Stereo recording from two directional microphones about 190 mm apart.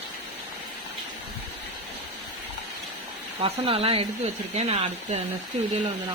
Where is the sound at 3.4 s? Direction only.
30° right (ahead or behind).